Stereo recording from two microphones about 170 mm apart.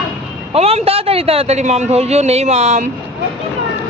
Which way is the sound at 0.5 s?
35° right (ahead or behind).